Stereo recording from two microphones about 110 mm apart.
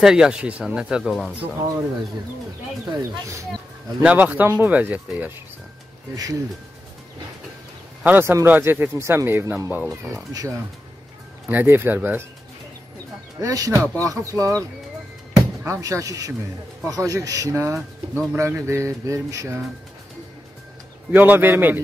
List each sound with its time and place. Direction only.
0.0 s speech: 5° right (ahead or behind)
4.0 s speech: 15° right (ahead or behind)
6.1 s speech: 30° right (ahead or behind)
8.0 s speech: 20° right (ahead or behind)
10.0 s speech: 30° right (ahead or behind)
11.4 s speech: 15° right (ahead or behind)
13.4 s speech: 30° right (ahead or behind)
21.1 s speech: 15° right (ahead or behind)